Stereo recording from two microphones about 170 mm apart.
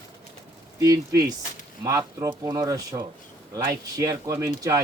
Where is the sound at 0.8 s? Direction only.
20° right (ahead or behind).